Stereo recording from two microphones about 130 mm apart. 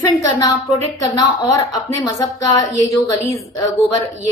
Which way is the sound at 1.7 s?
30° left (ahead or behind).